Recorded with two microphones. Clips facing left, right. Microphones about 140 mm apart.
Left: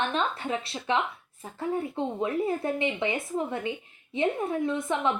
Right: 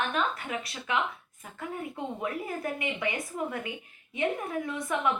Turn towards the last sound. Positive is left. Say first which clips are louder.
# left 3 dB
turn(degrees=25)  # may be behind; listen again after turning